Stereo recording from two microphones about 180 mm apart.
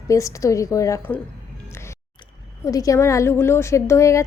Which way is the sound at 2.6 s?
20° left (ahead or behind).